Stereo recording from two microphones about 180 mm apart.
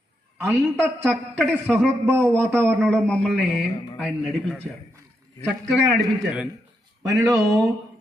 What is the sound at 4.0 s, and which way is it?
A man's voice, 5° right (ahead or behind).